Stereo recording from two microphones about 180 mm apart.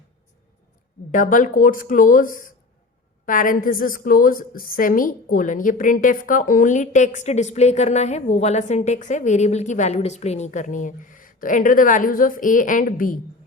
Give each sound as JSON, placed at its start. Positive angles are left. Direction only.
{"t": 1.1, "sound": "a woman's voice", "side_deg": 45}